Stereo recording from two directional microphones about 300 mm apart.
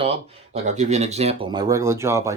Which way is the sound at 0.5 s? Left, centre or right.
Right.